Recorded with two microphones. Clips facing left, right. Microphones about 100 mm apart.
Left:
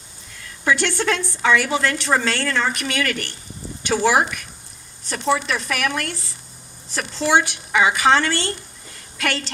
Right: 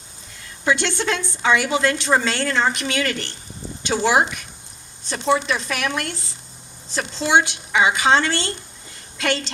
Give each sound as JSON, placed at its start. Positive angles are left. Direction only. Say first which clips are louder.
{"t": 0.6, "sound": "a woman's voice", "louder": "left 1 dB", "side_deg": -20}